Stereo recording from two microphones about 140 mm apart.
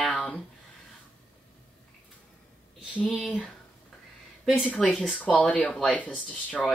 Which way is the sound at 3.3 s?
10° left (ahead or behind).